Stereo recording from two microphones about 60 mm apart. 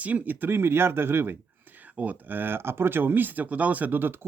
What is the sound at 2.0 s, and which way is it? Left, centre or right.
Speech, right.